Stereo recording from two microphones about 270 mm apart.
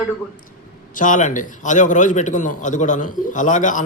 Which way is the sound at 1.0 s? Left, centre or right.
Left.